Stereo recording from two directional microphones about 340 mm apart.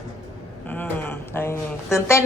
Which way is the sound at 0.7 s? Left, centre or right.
Centre.